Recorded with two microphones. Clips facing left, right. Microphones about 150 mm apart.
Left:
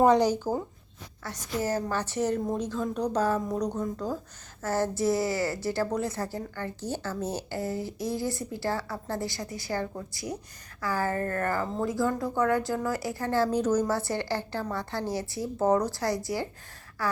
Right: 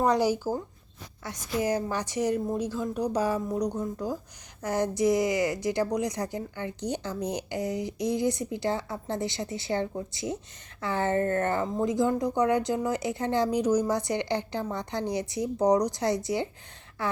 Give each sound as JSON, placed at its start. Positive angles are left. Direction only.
{"t": 0.2, "sound": "a woman's voice", "side_deg": -10}